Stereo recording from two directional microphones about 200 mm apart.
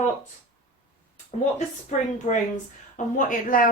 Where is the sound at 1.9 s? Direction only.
35° left (ahead or behind).